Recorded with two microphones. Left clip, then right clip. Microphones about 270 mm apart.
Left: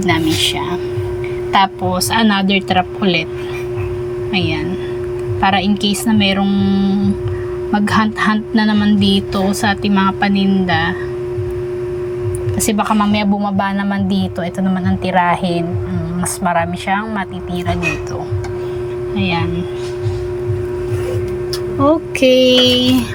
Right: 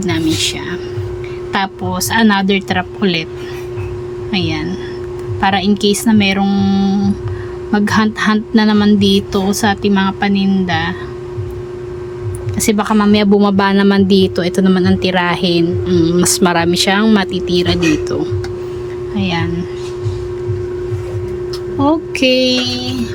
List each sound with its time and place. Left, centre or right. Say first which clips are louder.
1.5 s speech: left 4 dB; centre
4.3 s speech: right 1 dB; centre
12.7 s speech: right 2 dB; centre
19.1 s speech: even; centre
21.8 s a sound: left 1 dB; centre